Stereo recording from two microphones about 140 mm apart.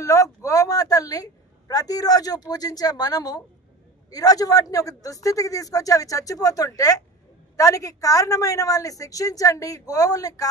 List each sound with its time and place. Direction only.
0.0 s a woman's voice: 25° left (ahead or behind)